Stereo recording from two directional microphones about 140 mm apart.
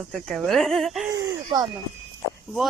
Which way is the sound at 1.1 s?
25° right (ahead or behind).